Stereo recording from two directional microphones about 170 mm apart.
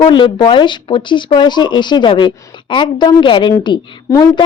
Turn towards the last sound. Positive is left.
turn(degrees=25)  # may be behind; listen again after turning